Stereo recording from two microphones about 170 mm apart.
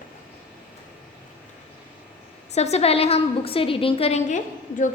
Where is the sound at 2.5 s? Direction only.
40° left (ahead or behind).